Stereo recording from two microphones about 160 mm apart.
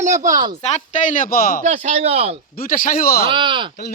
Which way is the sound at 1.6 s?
50° right (ahead or behind).